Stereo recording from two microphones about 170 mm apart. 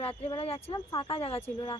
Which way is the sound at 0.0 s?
35° left (ahead or behind).